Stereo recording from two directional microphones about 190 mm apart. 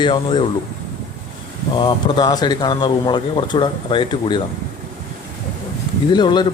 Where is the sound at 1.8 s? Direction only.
25° left (ahead or behind).